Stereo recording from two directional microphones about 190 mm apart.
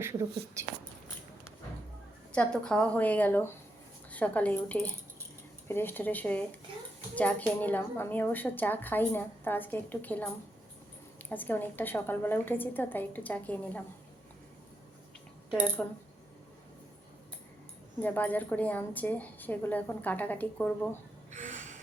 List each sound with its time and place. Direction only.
0.0 s speech: 15° right (ahead or behind)
2.3 s a woman's voice: 5° left (ahead or behind)
15.8 s speech: 5° left (ahead or behind)
18.0 s a woman's voice: 10° left (ahead or behind)
21.3 s gasp: 40° right (ahead or behind)